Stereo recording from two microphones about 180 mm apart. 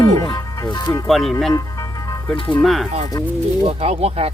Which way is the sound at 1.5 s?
20° left (ahead or behind).